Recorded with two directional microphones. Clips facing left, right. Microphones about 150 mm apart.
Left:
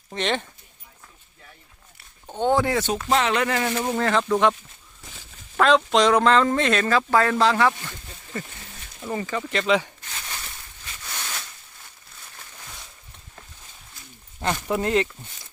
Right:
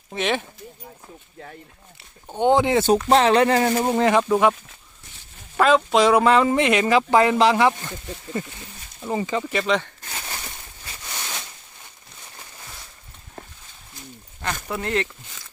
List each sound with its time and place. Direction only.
0.1 s speech: 5° right (ahead or behind)
2.2 s speech: 15° right (ahead or behind)
2.8 s speech: 35° right (ahead or behind)
3.9 s speech: 15° right (ahead or behind)
5.5 s speech: 5° right (ahead or behind)
9.5 s speech: 5° right (ahead or behind)
10.1 s a sound: 35° right (ahead or behind)
11.0 s a sound: 15° right (ahead or behind)
14.4 s speech: 20° left (ahead or behind)